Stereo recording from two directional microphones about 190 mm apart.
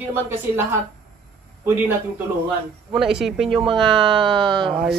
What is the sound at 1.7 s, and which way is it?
A man's voice, 10° right (ahead or behind).